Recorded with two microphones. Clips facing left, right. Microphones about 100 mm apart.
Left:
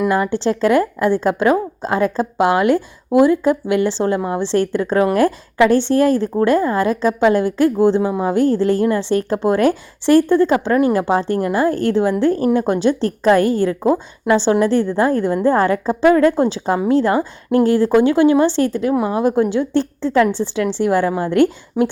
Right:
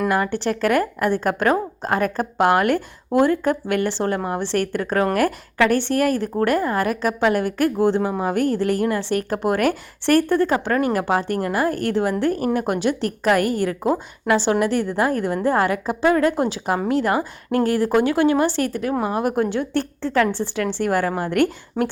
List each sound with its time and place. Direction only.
0.1 s a woman's voice: 20° left (ahead or behind)